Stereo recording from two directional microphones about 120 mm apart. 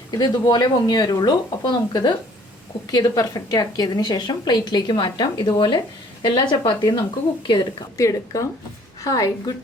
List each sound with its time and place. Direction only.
0.1 s a woman's voice: 35° left (ahead or behind)
7.9 s a woman's voice: 25° left (ahead or behind)